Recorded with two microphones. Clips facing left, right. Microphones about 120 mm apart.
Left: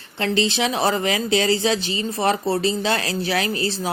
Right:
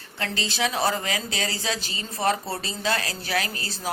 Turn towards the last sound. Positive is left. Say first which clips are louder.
# left 8 dB
turn(degrees=25)  # may be behind; listen again after turning